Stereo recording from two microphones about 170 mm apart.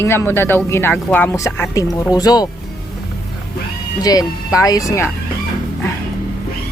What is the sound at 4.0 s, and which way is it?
Speech, 20° left (ahead or behind).